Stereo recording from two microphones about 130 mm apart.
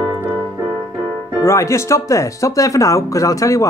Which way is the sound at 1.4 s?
20° left (ahead or behind).